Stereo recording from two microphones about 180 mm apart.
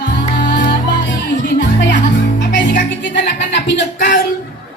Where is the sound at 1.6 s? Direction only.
75° left (ahead or behind).